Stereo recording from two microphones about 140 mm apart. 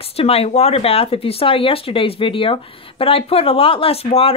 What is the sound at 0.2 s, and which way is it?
Speech, 45° left (ahead or behind).